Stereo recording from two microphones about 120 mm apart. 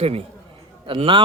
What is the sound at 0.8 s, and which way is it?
Speech, 45° right (ahead or behind).